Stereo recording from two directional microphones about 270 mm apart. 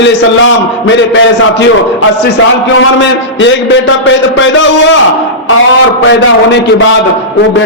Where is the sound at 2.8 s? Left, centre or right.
Left.